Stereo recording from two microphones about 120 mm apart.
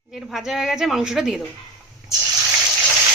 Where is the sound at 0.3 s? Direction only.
Centre (ahead or behind).